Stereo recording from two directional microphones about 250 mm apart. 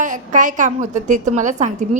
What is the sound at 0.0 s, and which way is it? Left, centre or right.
A woman's voice, right.